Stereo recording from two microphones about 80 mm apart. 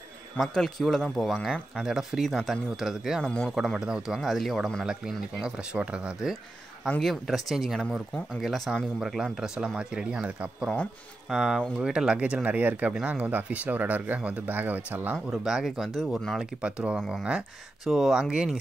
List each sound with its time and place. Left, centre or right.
0.4 s speech: centre
3.3 s speech: centre
3.5 s speech: centre
5.4 s speech: centre
7.0 s speech: centre; by 15.1 s right
15.3 s speech: centre
16.0 s speech: centre
16.6 s speech: centre